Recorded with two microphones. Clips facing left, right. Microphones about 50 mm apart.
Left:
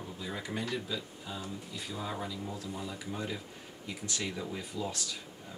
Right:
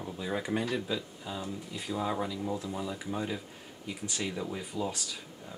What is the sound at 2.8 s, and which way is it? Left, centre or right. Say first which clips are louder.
Speech: right 4 dB; centre.